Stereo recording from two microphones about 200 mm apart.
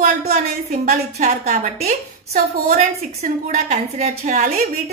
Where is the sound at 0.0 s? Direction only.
35° right (ahead or behind).